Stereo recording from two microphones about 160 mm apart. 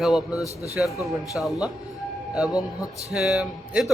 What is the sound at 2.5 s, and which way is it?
Speech, 25° left (ahead or behind).